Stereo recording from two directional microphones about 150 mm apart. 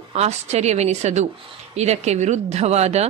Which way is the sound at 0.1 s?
45° right (ahead or behind).